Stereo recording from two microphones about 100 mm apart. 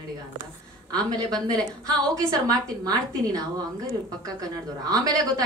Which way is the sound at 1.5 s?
40° right (ahead or behind).